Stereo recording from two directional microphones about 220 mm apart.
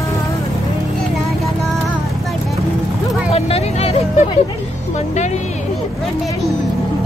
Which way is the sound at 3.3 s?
25° left (ahead or behind).